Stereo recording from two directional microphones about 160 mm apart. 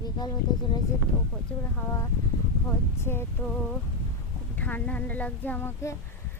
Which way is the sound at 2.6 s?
15° left (ahead or behind).